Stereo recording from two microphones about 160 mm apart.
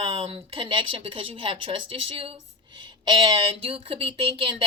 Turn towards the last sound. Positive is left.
turn(degrees=-30)  # may be behind; listen again after turning